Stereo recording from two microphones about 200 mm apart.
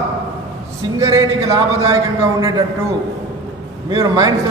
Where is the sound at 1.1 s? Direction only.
20° right (ahead or behind).